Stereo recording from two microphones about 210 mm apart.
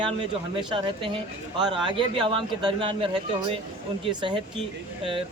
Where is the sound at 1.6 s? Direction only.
20° right (ahead or behind).